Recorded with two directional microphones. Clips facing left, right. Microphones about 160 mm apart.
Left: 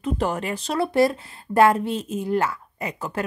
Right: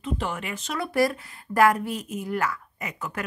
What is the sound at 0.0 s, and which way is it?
A woman's voice, 40° left (ahead or behind).